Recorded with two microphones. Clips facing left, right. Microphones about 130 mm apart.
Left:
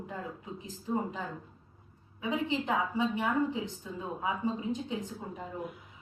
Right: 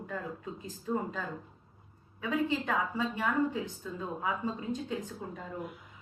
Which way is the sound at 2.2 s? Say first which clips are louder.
Right 1 dB; 15° left (ahead or behind).